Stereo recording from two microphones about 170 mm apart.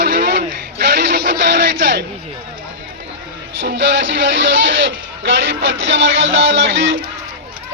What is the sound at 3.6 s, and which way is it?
Speech, 90° right.